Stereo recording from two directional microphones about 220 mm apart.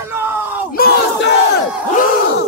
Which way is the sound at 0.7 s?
45° left (ahead or behind).